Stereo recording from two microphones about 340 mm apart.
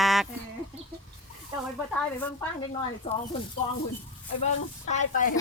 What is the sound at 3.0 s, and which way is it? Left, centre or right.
Speech, centre.